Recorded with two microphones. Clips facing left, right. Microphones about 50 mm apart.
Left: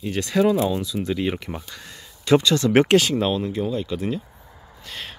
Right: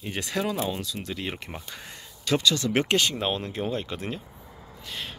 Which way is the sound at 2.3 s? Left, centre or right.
Left.